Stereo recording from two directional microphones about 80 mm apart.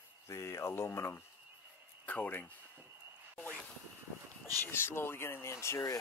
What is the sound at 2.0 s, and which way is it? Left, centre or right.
Speech, left.